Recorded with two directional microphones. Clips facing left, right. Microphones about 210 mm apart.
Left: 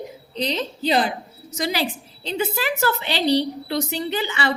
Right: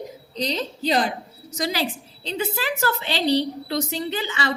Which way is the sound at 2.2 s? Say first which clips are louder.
Left 2 dB; 35° right (ahead or behind).